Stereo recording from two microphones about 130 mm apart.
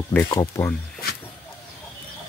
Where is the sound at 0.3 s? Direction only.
25° left (ahead or behind).